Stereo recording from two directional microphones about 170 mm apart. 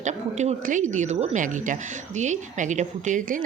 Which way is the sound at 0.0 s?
45° right (ahead or behind).